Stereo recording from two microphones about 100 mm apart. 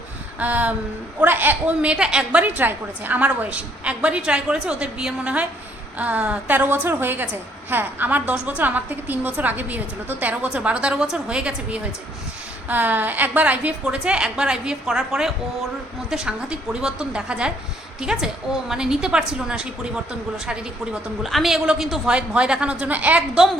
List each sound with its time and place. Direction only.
0.3 s a woman's voice: 15° right (ahead or behind)